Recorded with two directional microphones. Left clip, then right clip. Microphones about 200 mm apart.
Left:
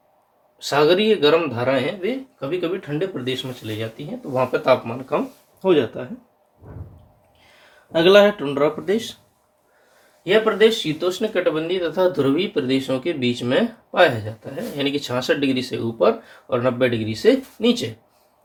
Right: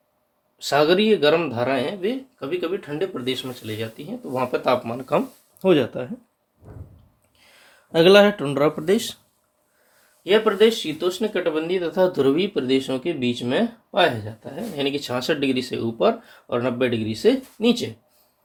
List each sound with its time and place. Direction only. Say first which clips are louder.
0.6 s speech: left 1 dB; 45° right (ahead or behind)
7.9 s speech: left 1 dB; 55° right (ahead or behind)
10.2 s speech: left 1 dB; 45° right (ahead or behind); by 14.1 s 25° right (ahead or behind)
14.5 s speech: left 1 dB; 40° right (ahead or behind)